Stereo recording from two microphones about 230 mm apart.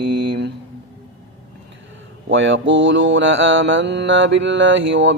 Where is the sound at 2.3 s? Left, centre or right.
Right.